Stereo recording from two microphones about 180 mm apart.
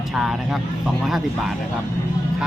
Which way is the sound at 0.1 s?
Centre (ahead or behind).